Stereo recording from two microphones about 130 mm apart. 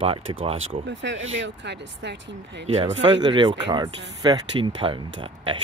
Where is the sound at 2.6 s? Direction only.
50° right (ahead or behind).